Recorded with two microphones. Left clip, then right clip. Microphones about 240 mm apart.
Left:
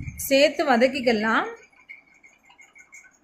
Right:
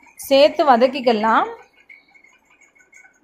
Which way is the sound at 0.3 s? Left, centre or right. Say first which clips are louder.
Right 6 dB; centre.